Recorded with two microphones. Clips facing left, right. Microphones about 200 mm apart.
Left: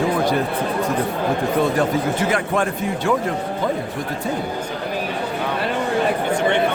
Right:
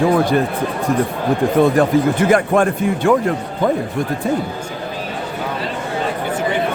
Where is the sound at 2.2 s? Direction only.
55° right (ahead or behind).